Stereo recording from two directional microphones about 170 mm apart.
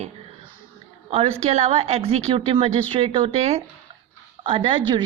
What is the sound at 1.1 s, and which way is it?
A woman's voice, 35° right (ahead or behind).